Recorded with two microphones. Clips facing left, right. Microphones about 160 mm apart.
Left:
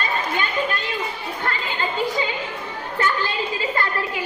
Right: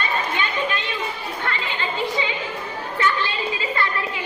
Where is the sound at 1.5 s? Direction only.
40° left (ahead or behind).